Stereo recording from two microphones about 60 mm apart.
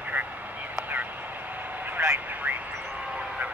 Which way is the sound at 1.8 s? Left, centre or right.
Right.